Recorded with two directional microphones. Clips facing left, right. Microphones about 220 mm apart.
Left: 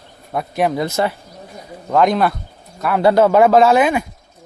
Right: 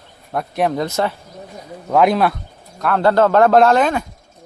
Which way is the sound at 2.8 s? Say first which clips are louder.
Left 1 dB; 10° left (ahead or behind).